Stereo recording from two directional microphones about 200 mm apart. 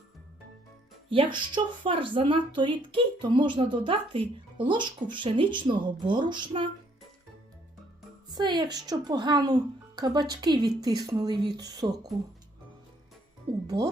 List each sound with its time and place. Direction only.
1.1 s a woman's voice: 25° right (ahead or behind)
8.4 s a woman's voice: 20° right (ahead or behind)
13.7 s a woman's voice: 20° right (ahead or behind)